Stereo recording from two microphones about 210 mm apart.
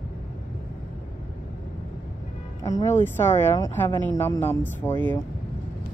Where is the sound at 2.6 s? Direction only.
15° left (ahead or behind).